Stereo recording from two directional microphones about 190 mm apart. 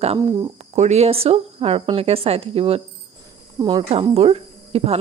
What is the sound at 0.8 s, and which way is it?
Speech, 35° right (ahead or behind).